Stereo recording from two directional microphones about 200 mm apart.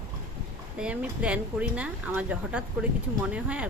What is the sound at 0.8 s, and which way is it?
A woman's voice, 5° right (ahead or behind).